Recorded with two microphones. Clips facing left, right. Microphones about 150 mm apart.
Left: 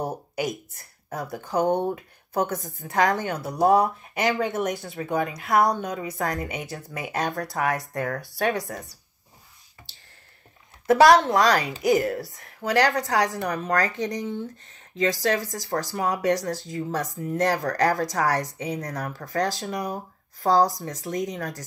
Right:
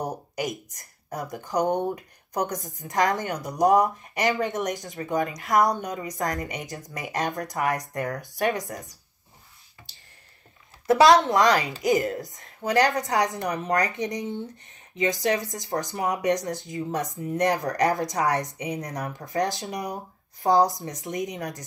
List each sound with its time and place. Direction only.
0.5 s speech: 15° right (ahead or behind)
5.7 s speech: 20° right (ahead or behind)
6.3 s a woman's voice: centre (ahead or behind)
7.1 s a woman's voice: 20° right (ahead or behind)
10.9 s a woman's voice: 20° right (ahead or behind)